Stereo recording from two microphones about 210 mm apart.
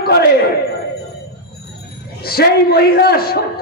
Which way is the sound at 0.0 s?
50° left (ahead or behind).